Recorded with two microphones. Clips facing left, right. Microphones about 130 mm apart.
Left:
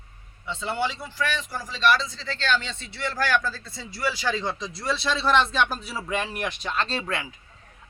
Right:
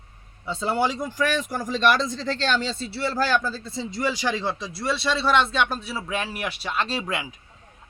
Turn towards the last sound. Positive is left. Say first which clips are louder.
# right 1 dB
turn(degrees=-10)  # may be behind; listen again after turning